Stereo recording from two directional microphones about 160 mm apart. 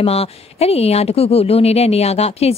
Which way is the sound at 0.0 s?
40° left (ahead or behind).